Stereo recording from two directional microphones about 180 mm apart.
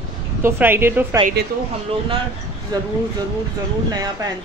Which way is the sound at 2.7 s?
20° right (ahead or behind).